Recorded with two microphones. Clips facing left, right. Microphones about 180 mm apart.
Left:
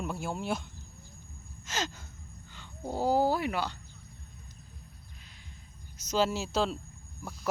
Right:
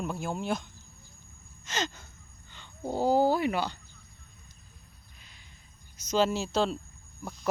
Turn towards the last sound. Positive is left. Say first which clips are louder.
# right 2 dB
turn(degrees=0)  # may be behind; listen again after turning